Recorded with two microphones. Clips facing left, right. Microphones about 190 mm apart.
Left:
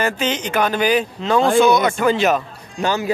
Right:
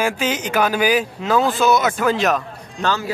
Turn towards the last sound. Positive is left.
turn(degrees=15)  # may be behind; listen again after turning